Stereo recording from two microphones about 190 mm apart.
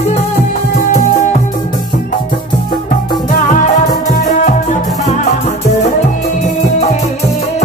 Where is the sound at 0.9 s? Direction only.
35° left (ahead or behind).